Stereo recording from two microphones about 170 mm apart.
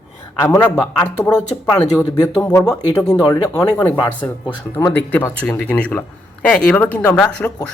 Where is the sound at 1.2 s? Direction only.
5° left (ahead or behind).